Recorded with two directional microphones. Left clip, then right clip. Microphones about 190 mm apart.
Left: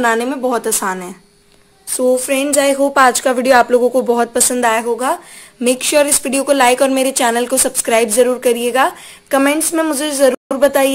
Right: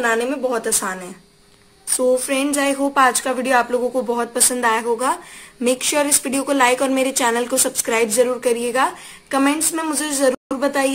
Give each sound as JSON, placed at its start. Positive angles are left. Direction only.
{"t": 0.0, "sound": "a woman's voice", "side_deg": 50}